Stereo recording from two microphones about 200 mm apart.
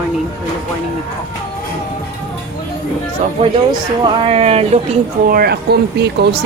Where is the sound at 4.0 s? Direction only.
30° right (ahead or behind).